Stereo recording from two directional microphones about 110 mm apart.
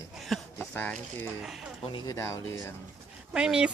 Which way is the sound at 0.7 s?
15° left (ahead or behind).